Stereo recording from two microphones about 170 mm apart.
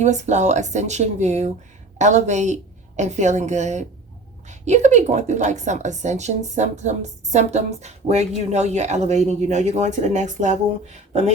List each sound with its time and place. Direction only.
0.0 s a woman's voice: 45° right (ahead or behind)